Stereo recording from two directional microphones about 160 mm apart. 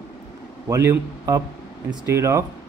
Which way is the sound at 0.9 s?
25° right (ahead or behind).